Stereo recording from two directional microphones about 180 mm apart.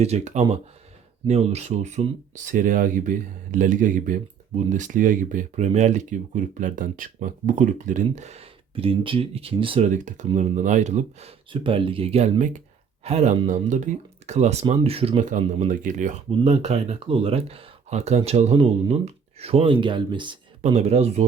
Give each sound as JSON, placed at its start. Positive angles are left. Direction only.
{"t": 0.0, "sound": "speech", "side_deg": -35}